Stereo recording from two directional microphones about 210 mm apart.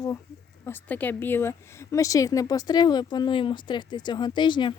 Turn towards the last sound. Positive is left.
turn(degrees=20)  # may be behind; listen again after turning